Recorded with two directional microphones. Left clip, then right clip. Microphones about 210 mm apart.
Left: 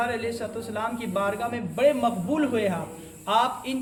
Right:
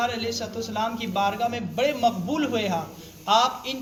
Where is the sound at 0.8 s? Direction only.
15° left (ahead or behind).